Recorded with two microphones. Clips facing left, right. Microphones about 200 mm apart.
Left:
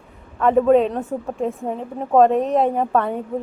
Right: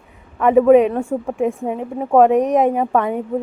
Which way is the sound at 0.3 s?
10° right (ahead or behind).